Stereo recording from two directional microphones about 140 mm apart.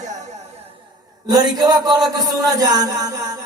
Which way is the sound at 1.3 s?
30° right (ahead or behind).